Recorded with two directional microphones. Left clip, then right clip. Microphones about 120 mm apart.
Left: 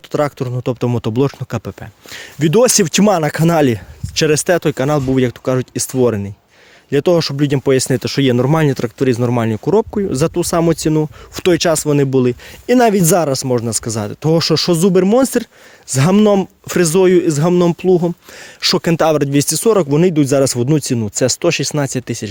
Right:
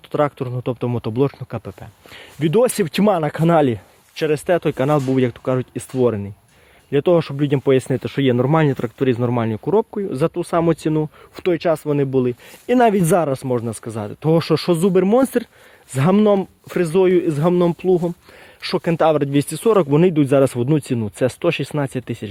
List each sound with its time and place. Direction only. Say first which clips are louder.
0.1 s speech: left 2 dB; 35° left (ahead or behind)
3.6 s speech: left 4 dB; 75° left (ahead or behind)
4.4 s speech: left 3 dB; 40° left (ahead or behind)
9.2 s speech: left 4 dB; 35° left (ahead or behind)
10.6 s speech: left 3 dB; 25° left (ahead or behind)
11.3 s speech: left 5 dB; 80° left; by 12.4 s 65° left (ahead or behind)
12.6 s speech: left 3 dB; 25° left (ahead or behind)
13.3 s speech: left 5 dB; 45° left (ahead or behind)
16.6 s speech: left 4 dB; 75° left (ahead or behind); by 18.1 s 55° left (ahead or behind)
18.6 s speech: left 4 dB; 80° left; by 19.6 s 50° left (ahead or behind)
19.6 s speech: left 1 dB; 20° left (ahead or behind); by 22.3 s 35° left (ahead or behind)